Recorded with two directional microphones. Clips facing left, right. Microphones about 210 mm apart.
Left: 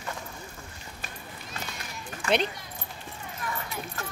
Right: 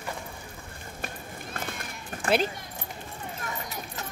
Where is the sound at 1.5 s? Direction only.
55° right (ahead or behind).